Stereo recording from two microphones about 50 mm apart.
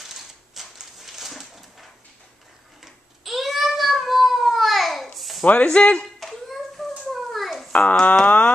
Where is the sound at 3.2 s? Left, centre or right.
Centre.